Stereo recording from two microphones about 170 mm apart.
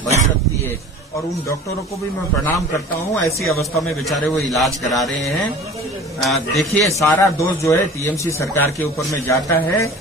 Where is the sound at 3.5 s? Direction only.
Centre (ahead or behind).